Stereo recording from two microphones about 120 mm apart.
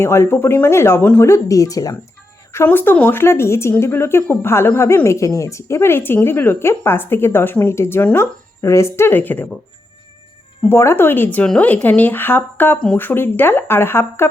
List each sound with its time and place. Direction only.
0.0 s speech: 20° left (ahead or behind)
2.5 s speech: 20° left (ahead or behind)
10.7 s speech: 20° left (ahead or behind)